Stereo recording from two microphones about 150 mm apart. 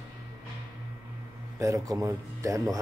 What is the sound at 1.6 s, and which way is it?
A man's voice, 20° right (ahead or behind).